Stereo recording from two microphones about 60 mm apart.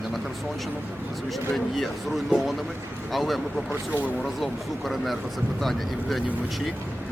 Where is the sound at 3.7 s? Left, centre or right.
Right.